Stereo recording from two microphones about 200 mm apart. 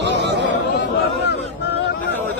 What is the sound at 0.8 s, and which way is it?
Speech, 55° left (ahead or behind).